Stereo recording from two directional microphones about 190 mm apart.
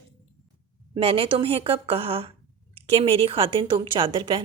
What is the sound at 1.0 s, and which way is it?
A woman's voice, 30° right (ahead or behind).